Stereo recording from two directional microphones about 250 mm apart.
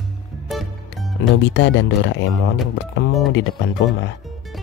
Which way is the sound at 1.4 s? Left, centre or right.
Left.